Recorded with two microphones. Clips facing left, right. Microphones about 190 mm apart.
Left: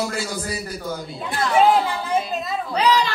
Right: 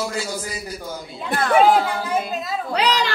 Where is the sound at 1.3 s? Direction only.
55° right (ahead or behind).